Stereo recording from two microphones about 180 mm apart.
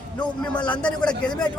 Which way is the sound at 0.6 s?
5° left (ahead or behind).